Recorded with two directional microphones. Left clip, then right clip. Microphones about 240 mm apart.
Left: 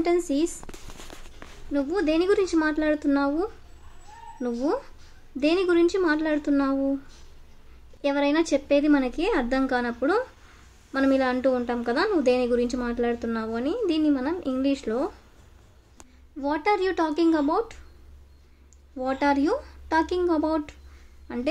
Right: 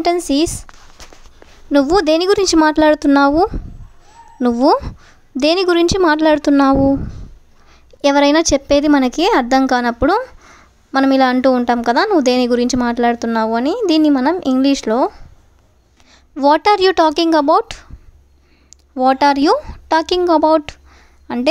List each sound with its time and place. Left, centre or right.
0.0 s a woman's voice: right
1.7 s a woman's voice: right
8.0 s a woman's voice: right